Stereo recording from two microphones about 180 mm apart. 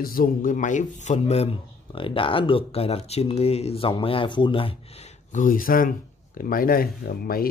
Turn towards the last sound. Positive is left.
turn(degrees=55)  # may be behind; listen again after turning